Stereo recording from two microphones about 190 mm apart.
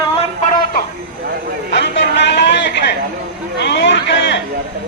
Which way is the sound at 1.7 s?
65° left (ahead or behind).